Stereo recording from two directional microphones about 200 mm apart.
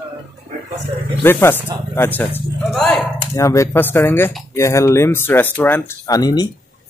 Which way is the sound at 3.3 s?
15° left (ahead or behind).